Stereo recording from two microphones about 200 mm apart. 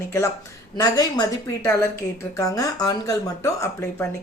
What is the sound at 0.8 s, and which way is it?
A woman's voice, 20° left (ahead or behind).